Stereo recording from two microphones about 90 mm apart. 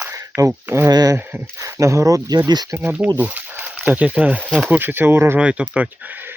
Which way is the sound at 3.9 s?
15° right (ahead or behind).